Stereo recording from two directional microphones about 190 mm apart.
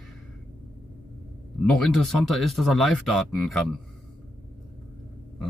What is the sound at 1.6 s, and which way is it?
Speech, centre (ahead or behind).